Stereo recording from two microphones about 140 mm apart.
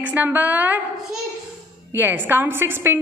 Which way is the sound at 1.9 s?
15° right (ahead or behind).